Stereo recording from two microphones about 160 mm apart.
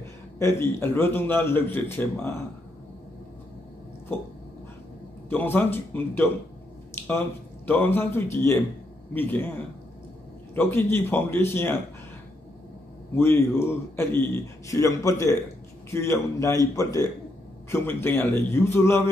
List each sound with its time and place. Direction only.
0.4 s a man's voice: 15° left (ahead or behind)
5.3 s a man's voice: 10° left (ahead or behind)
13.1 s a man's voice: 15° left (ahead or behind)